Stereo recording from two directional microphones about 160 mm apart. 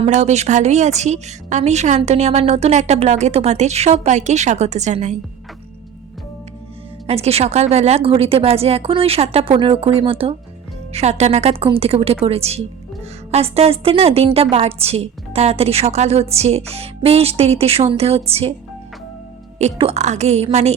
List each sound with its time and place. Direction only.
0.0 s a woman's voice: 45° right (ahead or behind)
7.1 s a woman's voice: 40° right (ahead or behind)
19.5 s a woman's voice: 40° right (ahead or behind)